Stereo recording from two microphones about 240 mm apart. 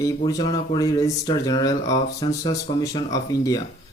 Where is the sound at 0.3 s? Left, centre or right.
Centre.